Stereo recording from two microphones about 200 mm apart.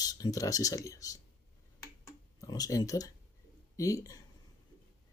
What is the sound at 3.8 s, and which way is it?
Speech, 15° left (ahead or behind).